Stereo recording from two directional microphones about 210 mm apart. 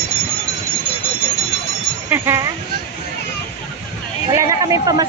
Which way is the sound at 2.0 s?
10° right (ahead or behind).